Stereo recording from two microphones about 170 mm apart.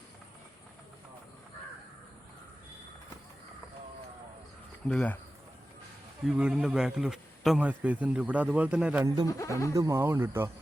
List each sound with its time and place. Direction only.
4.9 s speech: 5° left (ahead or behind)
6.2 s a man's voice: 5° right (ahead or behind)
9.2 s speech: 20° left (ahead or behind)
9.7 s a man's voice: 20° right (ahead or behind)